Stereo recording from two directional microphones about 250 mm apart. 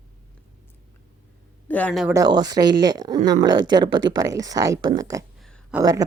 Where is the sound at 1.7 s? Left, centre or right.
Centre.